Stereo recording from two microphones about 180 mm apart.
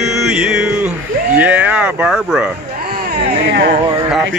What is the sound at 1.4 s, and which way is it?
Speech, 5° right (ahead or behind).